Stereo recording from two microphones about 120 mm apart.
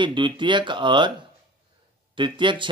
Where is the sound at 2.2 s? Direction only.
40° right (ahead or behind).